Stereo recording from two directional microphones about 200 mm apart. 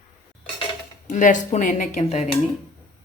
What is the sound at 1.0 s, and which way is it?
Speech, 40° left (ahead or behind).